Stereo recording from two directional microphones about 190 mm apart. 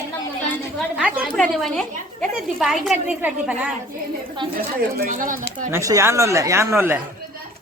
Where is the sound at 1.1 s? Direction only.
Centre (ahead or behind).